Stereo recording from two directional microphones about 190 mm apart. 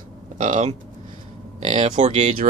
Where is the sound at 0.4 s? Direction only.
40° right (ahead or behind).